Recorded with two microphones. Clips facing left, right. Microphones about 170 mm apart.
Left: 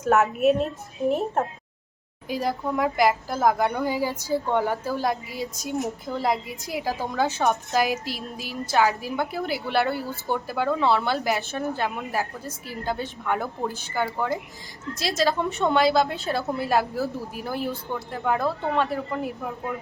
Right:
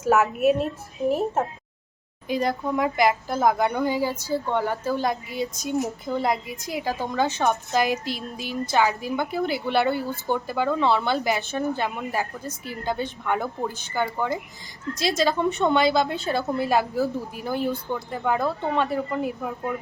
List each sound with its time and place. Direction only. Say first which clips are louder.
0.0 s a woman's voice: even; centre (ahead or behind); by 4.8 s 15° left (ahead or behind)
4.9 s a woman's voice: right 1 dB; 5° left (ahead or behind)